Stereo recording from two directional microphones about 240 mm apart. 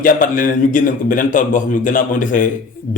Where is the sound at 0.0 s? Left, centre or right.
Left.